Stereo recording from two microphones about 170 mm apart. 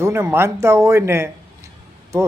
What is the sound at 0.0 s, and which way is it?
Speech, 15° right (ahead or behind).